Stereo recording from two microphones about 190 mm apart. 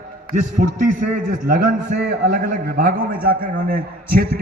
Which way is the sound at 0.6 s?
45° right (ahead or behind).